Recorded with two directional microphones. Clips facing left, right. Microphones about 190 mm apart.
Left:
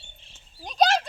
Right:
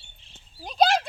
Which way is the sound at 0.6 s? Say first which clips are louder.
Even; 5° right (ahead or behind).